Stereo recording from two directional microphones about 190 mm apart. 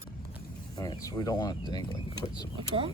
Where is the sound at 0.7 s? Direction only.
20° left (ahead or behind).